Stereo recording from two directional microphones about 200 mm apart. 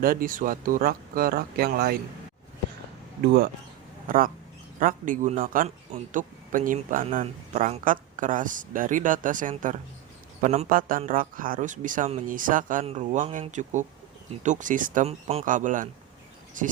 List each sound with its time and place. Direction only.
0.0 s speech: 45° right (ahead or behind)
4.1 s a man's voice: 45° right (ahead or behind)